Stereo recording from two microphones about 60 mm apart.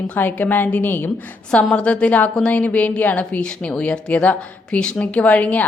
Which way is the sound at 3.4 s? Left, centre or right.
Centre.